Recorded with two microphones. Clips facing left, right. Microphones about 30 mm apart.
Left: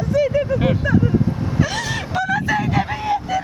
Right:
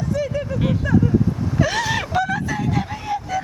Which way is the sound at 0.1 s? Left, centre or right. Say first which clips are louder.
Left 8 dB; centre.